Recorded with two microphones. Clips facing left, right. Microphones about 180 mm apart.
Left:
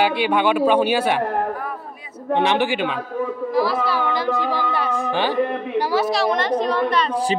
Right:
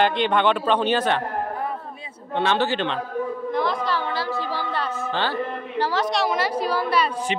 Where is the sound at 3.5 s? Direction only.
5° left (ahead or behind).